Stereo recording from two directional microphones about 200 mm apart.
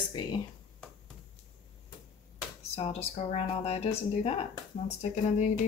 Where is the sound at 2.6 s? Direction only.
30° left (ahead or behind).